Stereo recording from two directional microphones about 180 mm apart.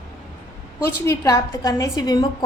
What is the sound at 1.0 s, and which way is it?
A woman's voice, 20° left (ahead or behind).